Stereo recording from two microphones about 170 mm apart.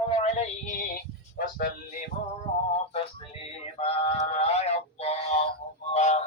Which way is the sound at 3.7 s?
35° left (ahead or behind).